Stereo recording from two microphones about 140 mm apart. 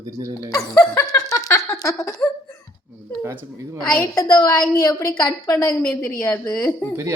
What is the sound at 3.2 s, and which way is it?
Speech, 15° right (ahead or behind).